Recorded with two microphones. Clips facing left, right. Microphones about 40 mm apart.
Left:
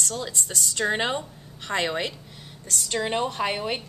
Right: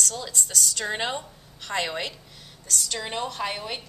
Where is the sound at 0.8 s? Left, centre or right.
Centre.